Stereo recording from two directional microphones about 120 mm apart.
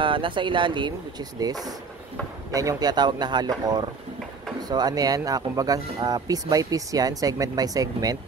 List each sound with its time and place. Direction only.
0.0 s speech: 45° right (ahead or behind)